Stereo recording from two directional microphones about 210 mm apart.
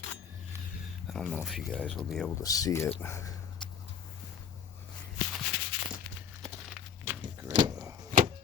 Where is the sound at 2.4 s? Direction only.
15° left (ahead or behind).